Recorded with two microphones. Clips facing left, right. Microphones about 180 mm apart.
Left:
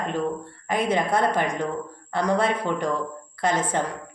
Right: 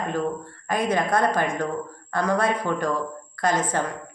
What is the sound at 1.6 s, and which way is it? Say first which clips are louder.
Speech: even; 15° left (ahead or behind).